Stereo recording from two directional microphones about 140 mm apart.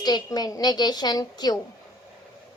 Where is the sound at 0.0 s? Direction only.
30° left (ahead or behind).